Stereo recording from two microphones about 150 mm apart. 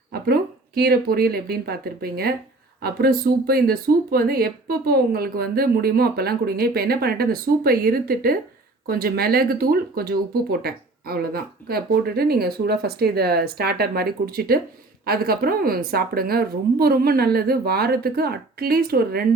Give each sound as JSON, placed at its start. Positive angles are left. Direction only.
{"t": 0.1, "sound": "speech", "side_deg": -90}